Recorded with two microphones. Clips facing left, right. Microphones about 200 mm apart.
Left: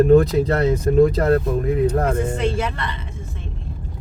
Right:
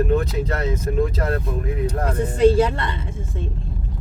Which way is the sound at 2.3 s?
30° right (ahead or behind).